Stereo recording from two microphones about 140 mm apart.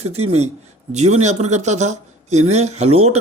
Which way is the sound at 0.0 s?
45° right (ahead or behind).